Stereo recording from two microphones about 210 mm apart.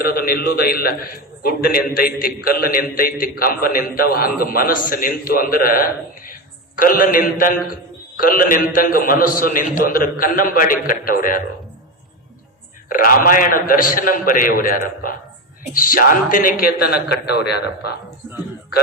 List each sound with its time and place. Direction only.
0.0 s a man's voice: 45° left (ahead or behind)
12.9 s a man's voice: 40° left (ahead or behind)